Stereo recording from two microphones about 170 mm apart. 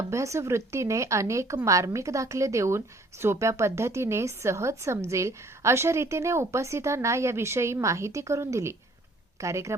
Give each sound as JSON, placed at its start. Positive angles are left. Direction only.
{"t": 0.1, "sound": "a woman's voice", "side_deg": -15}